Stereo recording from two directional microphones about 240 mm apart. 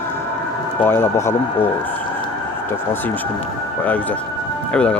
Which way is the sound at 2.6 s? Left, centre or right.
Centre.